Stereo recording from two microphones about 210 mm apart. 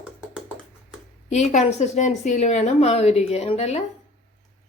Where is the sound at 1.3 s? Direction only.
35° left (ahead or behind).